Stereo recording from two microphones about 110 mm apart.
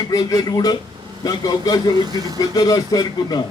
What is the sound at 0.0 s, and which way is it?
A man's voice, 35° left (ahead or behind).